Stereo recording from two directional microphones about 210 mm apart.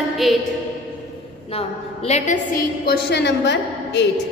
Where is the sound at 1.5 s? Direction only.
30° left (ahead or behind); by 4.1 s 55° left (ahead or behind).